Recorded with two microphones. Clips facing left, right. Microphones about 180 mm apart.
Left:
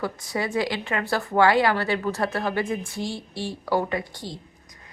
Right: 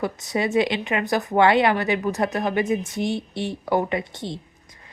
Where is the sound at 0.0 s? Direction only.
20° right (ahead or behind).